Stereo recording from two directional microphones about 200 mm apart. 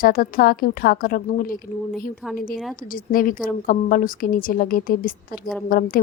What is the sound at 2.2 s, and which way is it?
Speech, 5° right (ahead or behind).